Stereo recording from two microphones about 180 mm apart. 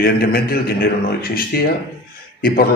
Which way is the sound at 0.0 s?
55° left (ahead or behind).